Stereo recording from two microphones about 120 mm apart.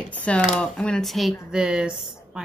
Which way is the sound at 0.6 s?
5° left (ahead or behind).